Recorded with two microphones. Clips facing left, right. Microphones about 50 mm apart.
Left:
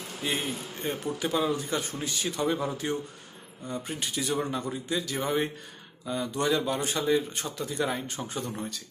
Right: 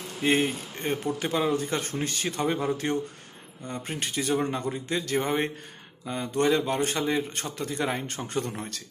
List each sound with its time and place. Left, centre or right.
0.2 s speech: right